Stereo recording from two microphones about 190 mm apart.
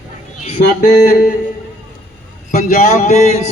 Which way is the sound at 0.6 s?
55° left (ahead or behind).